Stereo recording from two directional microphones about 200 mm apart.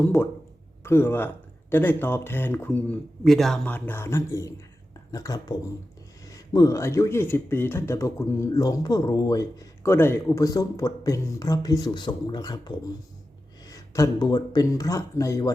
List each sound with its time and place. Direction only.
0.0 s speech: 10° left (ahead or behind)